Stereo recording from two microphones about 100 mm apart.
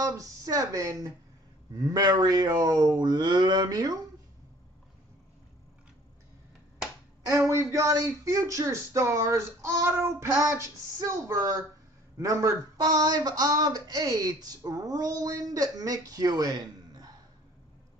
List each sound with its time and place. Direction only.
0.0 s speech: 40° right (ahead or behind)
7.2 s speech: 30° right (ahead or behind)